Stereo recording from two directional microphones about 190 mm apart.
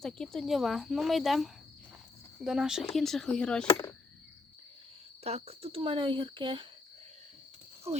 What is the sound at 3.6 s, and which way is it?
Speech, 25° left (ahead or behind).